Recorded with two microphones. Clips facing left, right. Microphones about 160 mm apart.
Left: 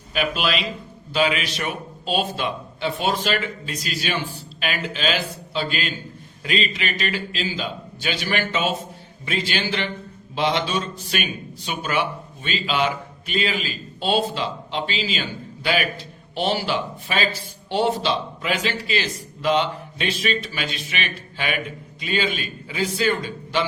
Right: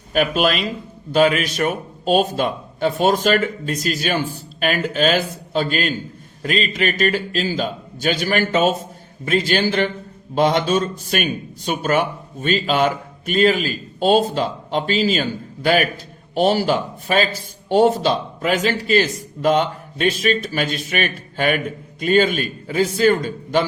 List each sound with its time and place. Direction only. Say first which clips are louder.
0.1 s a man's voice: right 6 dB; 45° right (ahead or behind)